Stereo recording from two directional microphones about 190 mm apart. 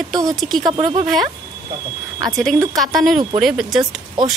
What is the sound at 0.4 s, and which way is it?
Speech, centre (ahead or behind).